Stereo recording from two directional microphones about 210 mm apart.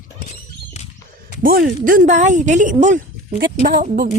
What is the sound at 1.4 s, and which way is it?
Speech, 40° right (ahead or behind).